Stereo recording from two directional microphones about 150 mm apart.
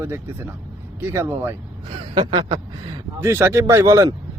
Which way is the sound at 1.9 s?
35° right (ahead or behind).